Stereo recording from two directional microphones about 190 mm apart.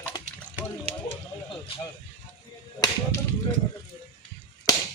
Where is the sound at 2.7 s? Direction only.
15° left (ahead or behind).